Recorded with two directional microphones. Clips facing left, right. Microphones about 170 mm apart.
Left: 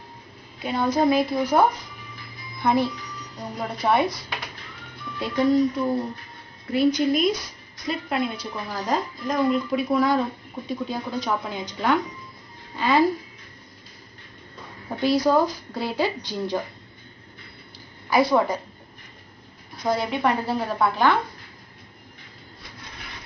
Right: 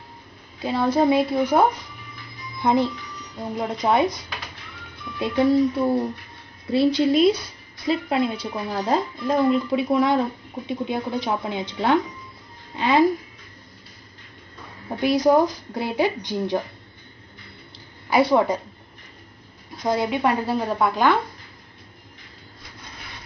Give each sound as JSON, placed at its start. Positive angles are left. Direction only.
{"t": 1.0, "sound": "speech", "side_deg": -25}
{"t": 5.2, "sound": "speech", "side_deg": -25}
{"t": 9.5, "sound": "speech", "side_deg": -20}
{"t": 14.9, "sound": "speech", "side_deg": -20}
{"t": 18.1, "sound": "speech", "side_deg": -30}
{"t": 19.9, "sound": "a woman's voice", "side_deg": -15}